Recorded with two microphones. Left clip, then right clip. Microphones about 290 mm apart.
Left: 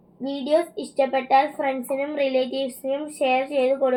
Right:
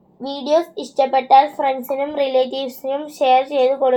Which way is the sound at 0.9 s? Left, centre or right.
Right.